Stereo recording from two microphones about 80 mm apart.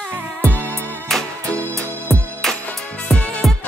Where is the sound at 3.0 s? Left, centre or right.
Centre.